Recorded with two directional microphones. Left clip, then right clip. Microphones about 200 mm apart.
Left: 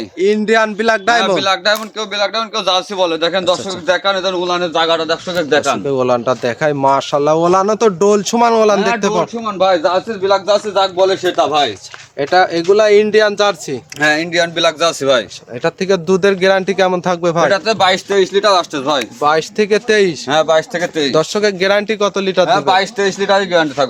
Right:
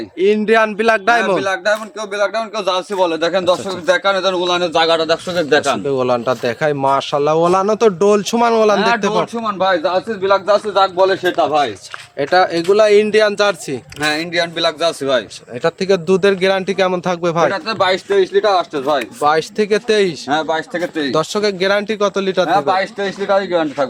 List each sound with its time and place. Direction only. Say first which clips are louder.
0.2 s speech: even; centre (ahead or behind)
1.4 s speech: left 3 dB; 15° left (ahead or behind); by 3.6 s 20° right (ahead or behind)
3.8 s a man's voice: even; 35° right (ahead or behind)
5.8 s speech: left 2 dB; 5° left (ahead or behind)
9.4 s a man's voice: left 4 dB; 25° right (ahead or behind)
10.2 s a man's voice: even; 5° right (ahead or behind)
14.0 s a man's voice: left 4 dB; 30° left (ahead or behind)
15.6 s speech: even; centre (ahead or behind)
17.5 s speech: left 4 dB; 60° left (ahead or behind)
19.2 s speech: left 2 dB; 5° left (ahead or behind)
20.2 s speech: left 5 dB; 55° left (ahead or behind)
21.1 s speech: left 2 dB; 10° left (ahead or behind)
22.4 s speech: left 2 dB; 70° left (ahead or behind)